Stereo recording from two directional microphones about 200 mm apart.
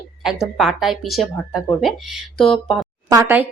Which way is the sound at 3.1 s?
15° right (ahead or behind).